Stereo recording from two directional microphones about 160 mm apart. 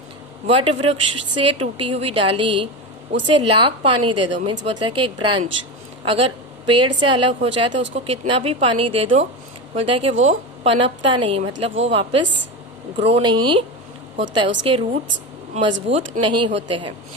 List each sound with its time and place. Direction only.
0.4 s speech: 35° right (ahead or behind)